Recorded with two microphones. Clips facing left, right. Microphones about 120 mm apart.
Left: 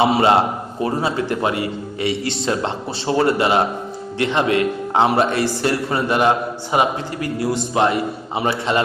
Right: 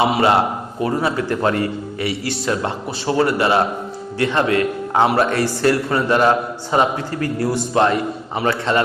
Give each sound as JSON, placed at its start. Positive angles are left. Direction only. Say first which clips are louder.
{"t": 0.1, "sound": "a man's voice", "louder": "left 1 dB", "side_deg": 25}